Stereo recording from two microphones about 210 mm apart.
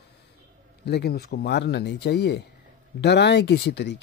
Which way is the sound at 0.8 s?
50° left (ahead or behind).